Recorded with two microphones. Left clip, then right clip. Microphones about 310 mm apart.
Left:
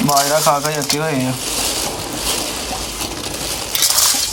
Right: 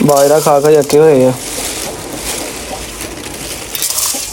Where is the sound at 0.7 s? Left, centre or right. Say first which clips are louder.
Right 12 dB; centre.